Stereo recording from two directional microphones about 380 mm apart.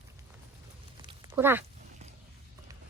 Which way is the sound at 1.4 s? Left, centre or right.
Centre.